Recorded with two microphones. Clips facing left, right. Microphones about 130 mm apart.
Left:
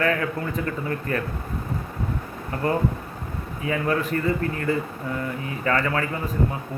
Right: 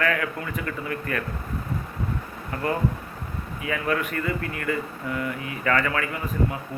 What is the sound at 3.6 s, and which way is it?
A man's voice, 30° left (ahead or behind).